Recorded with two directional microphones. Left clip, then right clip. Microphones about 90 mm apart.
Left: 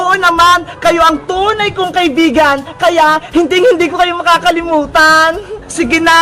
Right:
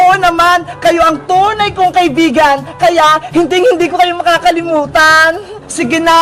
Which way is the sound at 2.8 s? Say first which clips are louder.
Right 1 dB; 35° left (ahead or behind).